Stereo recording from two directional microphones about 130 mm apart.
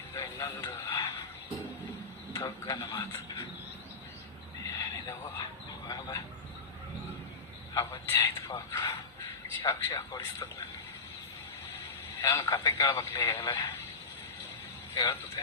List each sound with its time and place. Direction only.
0.1 s speech: 20° left (ahead or behind)
2.3 s a man's voice: 25° left (ahead or behind)
4.6 s a sound: 30° left (ahead or behind)
5.9 s a man's voice: 30° left (ahead or behind)
7.7 s a man's voice: 25° left (ahead or behind)
12.2 s a man's voice: 20° left (ahead or behind)
14.9 s a man's voice: 25° left (ahead or behind)